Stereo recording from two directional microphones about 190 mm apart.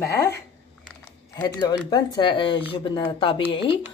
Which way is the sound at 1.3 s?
20° left (ahead or behind).